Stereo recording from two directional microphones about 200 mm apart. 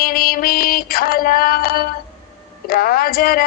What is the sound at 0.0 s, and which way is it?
Mantra, 45° left (ahead or behind).